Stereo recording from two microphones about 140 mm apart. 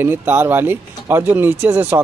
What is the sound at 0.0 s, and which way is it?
Speech, 15° right (ahead or behind).